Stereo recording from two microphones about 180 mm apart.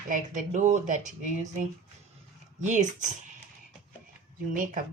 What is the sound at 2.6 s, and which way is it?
Speech, 45° right (ahead or behind).